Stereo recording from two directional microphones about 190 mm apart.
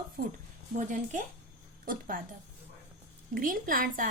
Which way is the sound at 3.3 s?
45° right (ahead or behind).